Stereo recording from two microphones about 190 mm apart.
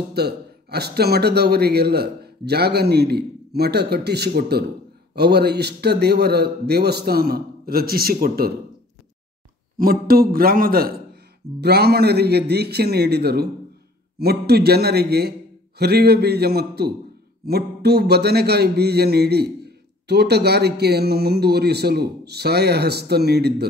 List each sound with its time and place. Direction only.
0.1 s speech: 60° right (ahead or behind)
9.8 s a man's voice: 50° right (ahead or behind)